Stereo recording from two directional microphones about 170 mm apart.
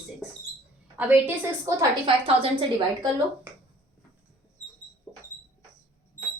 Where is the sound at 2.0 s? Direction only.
30° right (ahead or behind).